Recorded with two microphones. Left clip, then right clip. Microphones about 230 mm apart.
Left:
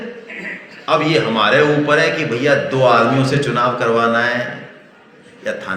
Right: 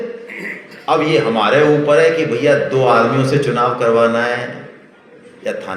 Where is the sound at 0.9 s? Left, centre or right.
Centre.